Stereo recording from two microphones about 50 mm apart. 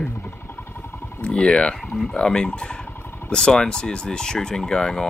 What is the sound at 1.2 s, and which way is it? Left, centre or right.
Speech, centre.